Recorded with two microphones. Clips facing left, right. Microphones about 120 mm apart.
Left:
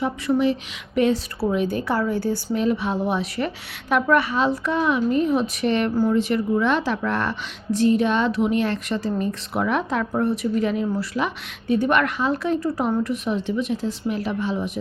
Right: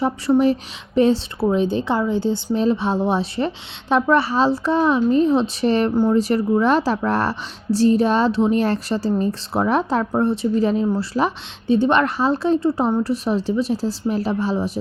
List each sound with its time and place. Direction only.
0.0 s a woman's voice: 40° right (ahead or behind)